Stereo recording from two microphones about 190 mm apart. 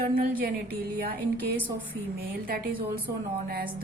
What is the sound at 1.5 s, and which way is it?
Speech, 10° left (ahead or behind).